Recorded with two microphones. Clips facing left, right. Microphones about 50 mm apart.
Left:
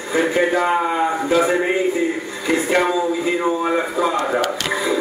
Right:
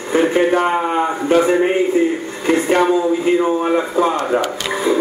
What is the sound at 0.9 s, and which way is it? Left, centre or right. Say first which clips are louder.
Speech: right 3 dB; right.